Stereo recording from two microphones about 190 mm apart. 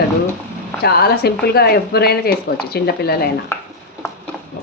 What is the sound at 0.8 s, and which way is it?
A woman's voice, 55° left (ahead or behind).